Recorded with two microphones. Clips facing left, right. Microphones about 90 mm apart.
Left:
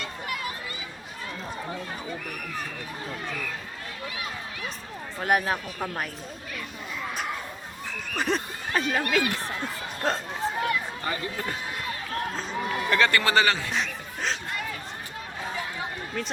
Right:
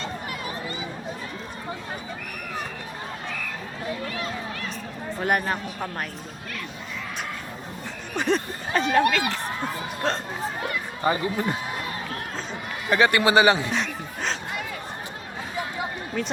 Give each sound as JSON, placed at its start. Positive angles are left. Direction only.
{"t": 4.0, "sound": "run", "side_deg": 10}
{"t": 5.2, "sound": "speech", "side_deg": 0}
{"t": 8.1, "sound": "speech", "side_deg": 0}
{"t": 10.6, "sound": "a sound", "side_deg": -25}
{"t": 12.9, "sound": "speech", "side_deg": -15}
{"t": 13.7, "sound": "a sound", "side_deg": 0}
{"t": 16.1, "sound": "speech", "side_deg": 0}